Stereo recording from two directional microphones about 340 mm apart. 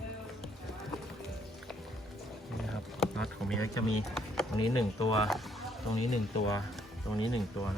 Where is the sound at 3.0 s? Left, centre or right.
Centre.